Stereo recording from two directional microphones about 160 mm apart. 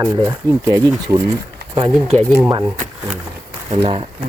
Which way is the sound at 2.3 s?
20° right (ahead or behind).